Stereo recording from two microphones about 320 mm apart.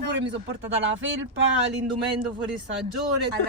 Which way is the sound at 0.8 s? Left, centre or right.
Right.